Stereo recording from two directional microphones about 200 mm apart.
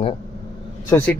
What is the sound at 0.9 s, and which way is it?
Speech, 10° left (ahead or behind).